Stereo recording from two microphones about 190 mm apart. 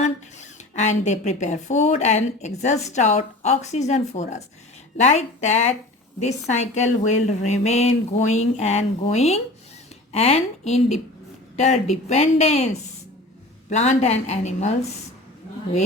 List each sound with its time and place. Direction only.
0.0 s a woman's voice: 40° left (ahead or behind)
13.7 s a woman's voice: 35° left (ahead or behind)